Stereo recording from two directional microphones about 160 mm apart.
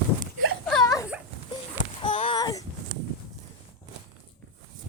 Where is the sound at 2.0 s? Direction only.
35° left (ahead or behind).